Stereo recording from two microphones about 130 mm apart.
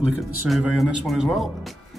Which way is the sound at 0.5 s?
Centre (ahead or behind).